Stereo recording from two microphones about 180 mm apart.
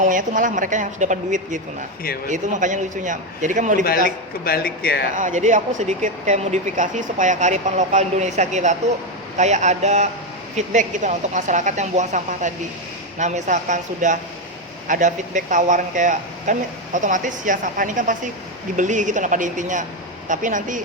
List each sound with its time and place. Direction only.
0.0 s speech: 45° right (ahead or behind)
4.4 s speech: 60° left (ahead or behind)
5.1 s speech: 45° right (ahead or behind)